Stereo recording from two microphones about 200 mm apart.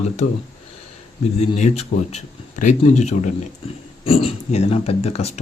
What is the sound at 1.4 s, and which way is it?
Speech, 30° left (ahead or behind).